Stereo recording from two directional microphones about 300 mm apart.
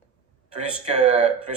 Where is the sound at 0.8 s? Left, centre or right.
Right.